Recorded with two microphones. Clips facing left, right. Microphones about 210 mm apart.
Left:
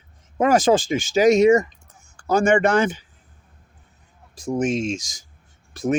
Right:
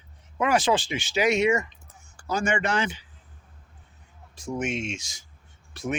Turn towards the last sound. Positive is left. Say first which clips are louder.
# left 8 dB
turn(degrees=45)  # may be behind; listen again after turning